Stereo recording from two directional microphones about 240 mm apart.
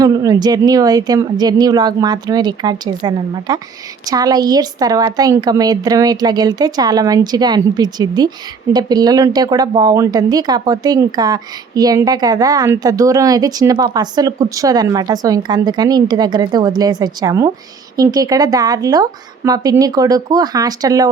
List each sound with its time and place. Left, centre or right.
0.0 s speech: centre